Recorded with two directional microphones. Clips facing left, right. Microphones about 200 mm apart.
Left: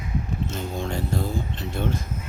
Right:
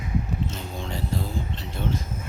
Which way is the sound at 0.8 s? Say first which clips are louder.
Left 3 dB; 50° left (ahead or behind).